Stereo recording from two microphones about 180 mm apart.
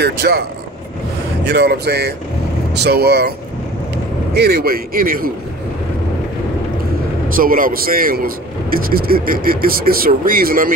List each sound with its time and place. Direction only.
0.0 s speech: 65° right (ahead or behind)
7.3 s a man's voice: 50° right (ahead or behind)